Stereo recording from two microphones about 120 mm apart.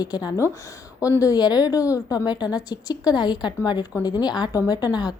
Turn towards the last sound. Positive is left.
turn(degrees=35)  # may be behind; listen again after turning